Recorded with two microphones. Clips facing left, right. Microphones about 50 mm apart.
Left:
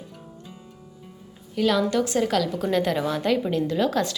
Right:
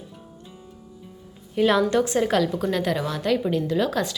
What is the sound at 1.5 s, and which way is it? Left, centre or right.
A woman's voice, right.